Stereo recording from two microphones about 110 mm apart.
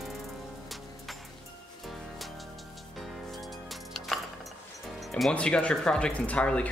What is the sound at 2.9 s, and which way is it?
Music, centre (ahead or behind).